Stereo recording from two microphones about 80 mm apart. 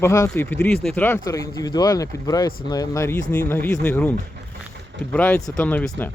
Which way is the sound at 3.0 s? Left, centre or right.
Left.